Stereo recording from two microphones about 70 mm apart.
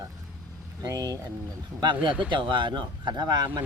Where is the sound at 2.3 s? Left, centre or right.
Right.